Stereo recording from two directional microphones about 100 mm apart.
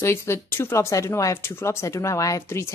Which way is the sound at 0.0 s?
25° left (ahead or behind).